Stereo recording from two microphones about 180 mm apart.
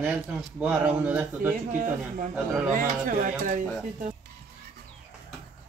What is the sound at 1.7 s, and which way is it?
Speech, 50° right (ahead or behind).